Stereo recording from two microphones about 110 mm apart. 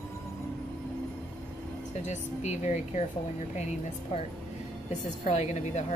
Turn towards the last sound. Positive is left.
turn(degrees=90)